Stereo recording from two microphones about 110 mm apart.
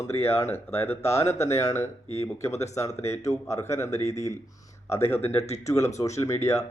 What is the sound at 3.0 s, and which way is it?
Speech, 25° left (ahead or behind).